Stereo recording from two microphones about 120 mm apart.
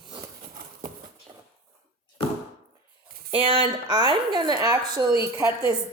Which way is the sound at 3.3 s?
45° right (ahead or behind).